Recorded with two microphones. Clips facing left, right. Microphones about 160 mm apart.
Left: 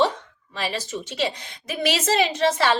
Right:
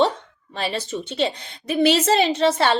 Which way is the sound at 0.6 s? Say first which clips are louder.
Right 2 dB; 30° right (ahead or behind).